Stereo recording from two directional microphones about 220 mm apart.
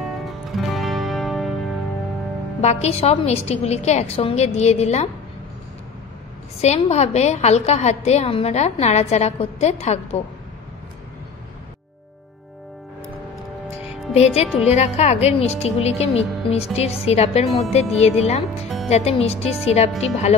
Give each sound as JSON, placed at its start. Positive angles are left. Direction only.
{"t": 0.0, "sound": "music", "side_deg": 0}
{"t": 2.6, "sound": "a woman's voice", "side_deg": 30}
{"t": 6.6, "sound": "a woman's voice", "side_deg": 30}
{"t": 14.1, "sound": "a woman's voice", "side_deg": 30}
{"t": 14.4, "sound": "a woman's voice", "side_deg": 0}
{"t": 14.7, "sound": "a woman's voice", "side_deg": 30}